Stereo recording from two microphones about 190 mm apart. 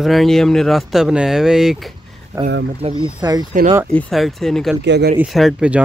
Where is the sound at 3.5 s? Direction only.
45° right (ahead or behind).